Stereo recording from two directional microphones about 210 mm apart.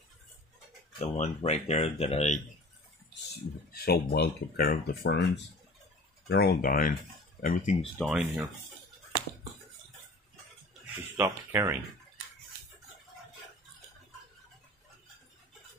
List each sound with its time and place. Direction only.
0.9 s speech: 35° left (ahead or behind)
3.7 s speech: 50° left (ahead or behind)
8.0 s speech: centre (ahead or behind)
11.1 s speech: 15° right (ahead or behind)